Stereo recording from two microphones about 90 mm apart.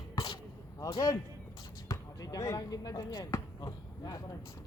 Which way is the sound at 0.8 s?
40° left (ahead or behind).